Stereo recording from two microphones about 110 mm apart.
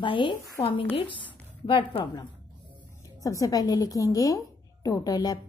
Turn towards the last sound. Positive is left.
turn(degrees=35)  # may be behind; listen again after turning